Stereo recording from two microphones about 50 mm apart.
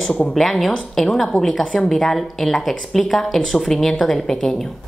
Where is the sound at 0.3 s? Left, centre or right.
Centre.